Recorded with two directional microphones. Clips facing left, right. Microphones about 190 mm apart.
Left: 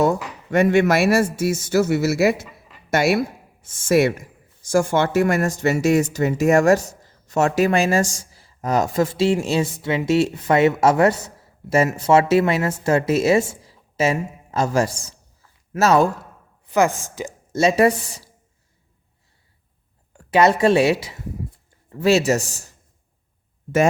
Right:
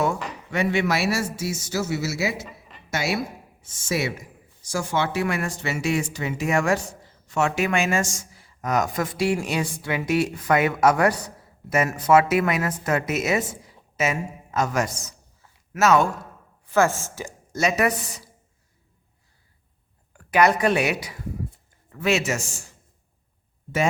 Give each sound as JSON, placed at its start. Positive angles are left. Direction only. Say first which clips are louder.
{"t": 0.5, "sound": "a man's voice", "louder": "left 7 dB", "side_deg": 50}
{"t": 16.6, "sound": "speech", "louder": "left 2 dB", "side_deg": 20}
{"t": 20.1, "sound": "speech", "louder": "left 3 dB", "side_deg": 25}